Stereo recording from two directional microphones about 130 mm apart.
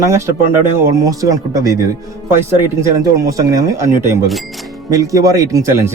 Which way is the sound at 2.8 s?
25° right (ahead or behind).